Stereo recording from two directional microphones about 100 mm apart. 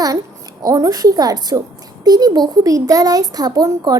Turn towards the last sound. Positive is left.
turn(degrees=-40)  # may be behind; listen again after turning